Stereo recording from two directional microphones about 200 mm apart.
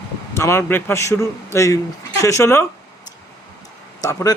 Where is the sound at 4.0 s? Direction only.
15° left (ahead or behind).